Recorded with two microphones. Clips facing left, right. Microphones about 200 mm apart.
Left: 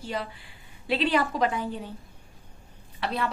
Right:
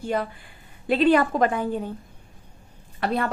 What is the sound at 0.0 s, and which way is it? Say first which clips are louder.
A woman's voice: right 6 dB; 50° right (ahead or behind).